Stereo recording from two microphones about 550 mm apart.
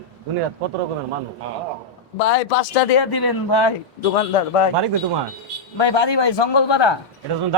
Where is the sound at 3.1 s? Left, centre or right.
Left.